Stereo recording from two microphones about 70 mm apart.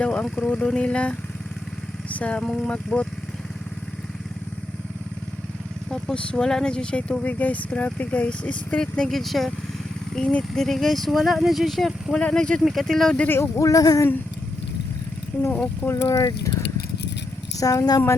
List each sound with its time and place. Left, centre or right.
0.0 s speech: centre
2.0 s vehicle: centre
2.4 s speech: centre
5.9 s speech: centre
8.8 s speech: centre
12.1 s speech: centre
13.2 s speech: left
13.6 s female singing: left
15.5 s speech: left
16.2 s speech: left
17.6 s female singing: left